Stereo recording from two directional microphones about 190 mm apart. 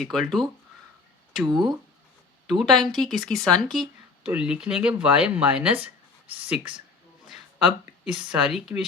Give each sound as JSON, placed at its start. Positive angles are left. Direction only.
{"t": 0.0, "sound": "speech", "side_deg": 0}
{"t": 1.4, "sound": "speech", "side_deg": -25}
{"t": 2.5, "sound": "speech", "side_deg": 0}
{"t": 7.3, "sound": "a sound", "side_deg": 0}
{"t": 8.3, "sound": "speech", "side_deg": 0}